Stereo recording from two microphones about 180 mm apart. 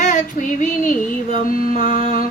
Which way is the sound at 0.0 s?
45° left (ahead or behind).